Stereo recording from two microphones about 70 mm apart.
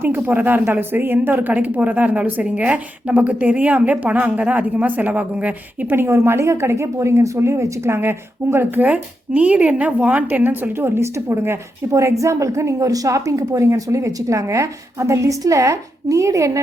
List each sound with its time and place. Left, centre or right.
0.0 s a woman's voice: right
6.0 s a woman's voice: right
8.8 s a woman's voice: right